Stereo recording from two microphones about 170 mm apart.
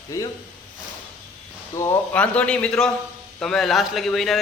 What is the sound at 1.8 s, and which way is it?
A man's voice, 10° left (ahead or behind).